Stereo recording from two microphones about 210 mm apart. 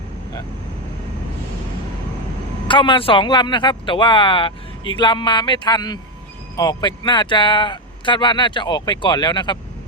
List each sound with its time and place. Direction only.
2.6 s speech: 25° left (ahead or behind)